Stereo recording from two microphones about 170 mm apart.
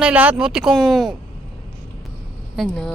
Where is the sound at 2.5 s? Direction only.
5° left (ahead or behind).